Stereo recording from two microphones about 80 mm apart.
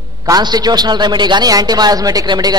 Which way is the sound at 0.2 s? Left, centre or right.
Right.